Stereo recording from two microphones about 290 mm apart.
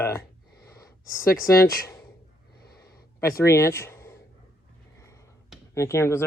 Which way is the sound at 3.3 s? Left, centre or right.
Centre.